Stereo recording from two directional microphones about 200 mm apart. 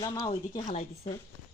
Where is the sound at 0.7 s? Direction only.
35° left (ahead or behind).